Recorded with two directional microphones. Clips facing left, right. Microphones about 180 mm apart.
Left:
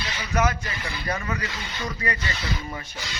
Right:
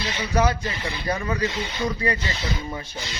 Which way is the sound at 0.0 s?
30° right (ahead or behind).